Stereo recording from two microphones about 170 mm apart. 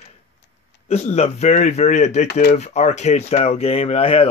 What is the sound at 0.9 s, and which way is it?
A man's voice, 40° left (ahead or behind).